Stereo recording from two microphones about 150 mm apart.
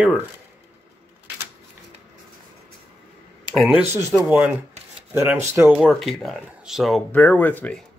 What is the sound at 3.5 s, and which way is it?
Speech, 5° right (ahead or behind).